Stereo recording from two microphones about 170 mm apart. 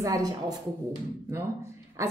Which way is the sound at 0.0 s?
20° right (ahead or behind).